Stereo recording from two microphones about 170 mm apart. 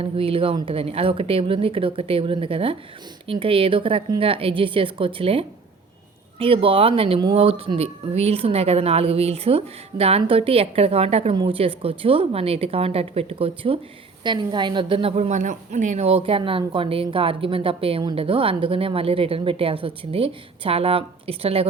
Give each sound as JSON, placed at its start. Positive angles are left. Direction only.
{"t": 0.0, "sound": "a woman's voice", "side_deg": -35}